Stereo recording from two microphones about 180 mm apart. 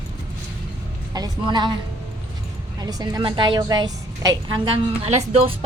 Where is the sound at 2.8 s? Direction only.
20° right (ahead or behind).